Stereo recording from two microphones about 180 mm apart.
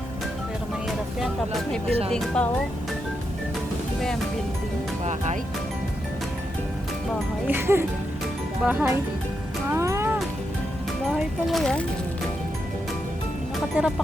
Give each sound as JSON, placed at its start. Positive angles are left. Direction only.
{"t": 1.2, "sound": "speech", "side_deg": 0}
{"t": 5.0, "sound": "speech", "side_deg": -40}
{"t": 7.4, "sound": "speech", "side_deg": -10}
{"t": 9.6, "sound": "music", "side_deg": -15}
{"t": 11.4, "sound": "speech", "side_deg": 0}
{"t": 13.7, "sound": "speech", "side_deg": -10}